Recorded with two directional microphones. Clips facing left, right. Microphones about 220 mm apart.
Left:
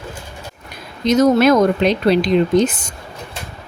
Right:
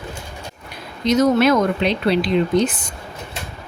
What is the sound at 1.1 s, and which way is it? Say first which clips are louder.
Speech: left 3 dB; 45° left (ahead or behind).